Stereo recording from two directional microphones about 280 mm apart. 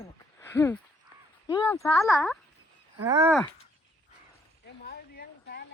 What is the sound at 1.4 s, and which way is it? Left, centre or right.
Speech, centre.